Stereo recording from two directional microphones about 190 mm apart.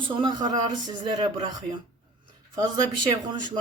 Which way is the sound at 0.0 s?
25° right (ahead or behind).